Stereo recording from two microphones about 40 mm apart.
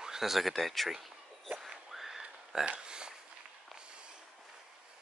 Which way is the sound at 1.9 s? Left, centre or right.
Centre.